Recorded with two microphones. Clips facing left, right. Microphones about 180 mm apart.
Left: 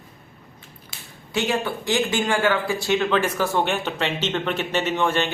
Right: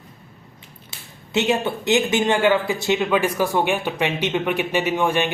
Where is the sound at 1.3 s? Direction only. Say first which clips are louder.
Right 3 dB; 25° right (ahead or behind).